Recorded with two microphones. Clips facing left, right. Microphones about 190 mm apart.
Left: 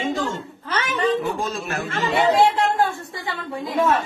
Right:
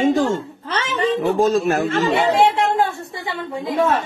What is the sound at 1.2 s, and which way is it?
Speech, 45° right (ahead or behind).